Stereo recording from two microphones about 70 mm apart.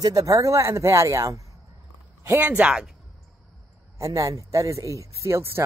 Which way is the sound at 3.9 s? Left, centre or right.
Right.